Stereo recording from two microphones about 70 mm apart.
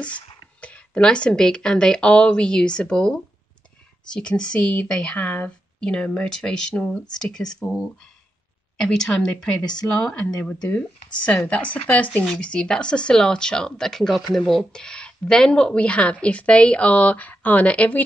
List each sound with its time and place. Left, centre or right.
0.0 s a woman's voice: centre